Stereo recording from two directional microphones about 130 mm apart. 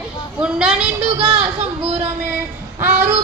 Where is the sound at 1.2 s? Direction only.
45° right (ahead or behind).